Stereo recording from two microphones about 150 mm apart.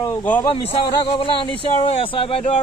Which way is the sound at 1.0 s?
35° left (ahead or behind).